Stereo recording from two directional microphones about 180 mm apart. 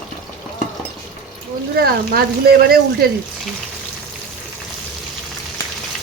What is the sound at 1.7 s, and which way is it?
Speech, 60° right (ahead or behind).